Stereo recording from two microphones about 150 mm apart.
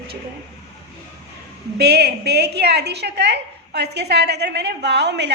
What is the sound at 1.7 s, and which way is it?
A woman's voice, 90° right.